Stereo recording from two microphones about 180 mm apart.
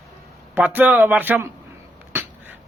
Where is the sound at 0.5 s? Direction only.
10° right (ahead or behind).